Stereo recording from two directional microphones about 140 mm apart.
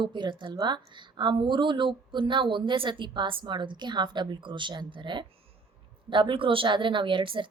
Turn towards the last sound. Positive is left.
turn(degrees=-35)  # may be behind; listen again after turning